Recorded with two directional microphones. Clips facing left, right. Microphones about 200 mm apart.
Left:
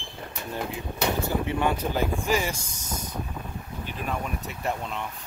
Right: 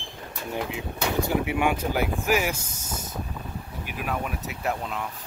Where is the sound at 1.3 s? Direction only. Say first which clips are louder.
Right 1 dB; 10° right (ahead or behind).